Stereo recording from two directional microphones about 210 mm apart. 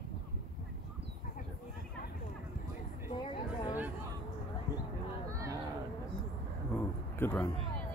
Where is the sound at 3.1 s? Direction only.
25° left (ahead or behind).